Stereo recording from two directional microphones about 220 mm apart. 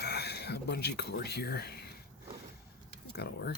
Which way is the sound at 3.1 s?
45° left (ahead or behind).